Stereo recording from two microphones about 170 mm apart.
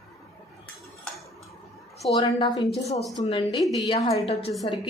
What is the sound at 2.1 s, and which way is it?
Speech, 25° left (ahead or behind).